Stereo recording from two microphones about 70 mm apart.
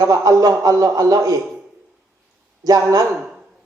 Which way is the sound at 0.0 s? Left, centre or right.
Right.